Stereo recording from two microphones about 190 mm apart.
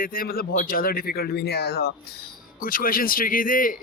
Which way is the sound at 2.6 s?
50° left (ahead or behind).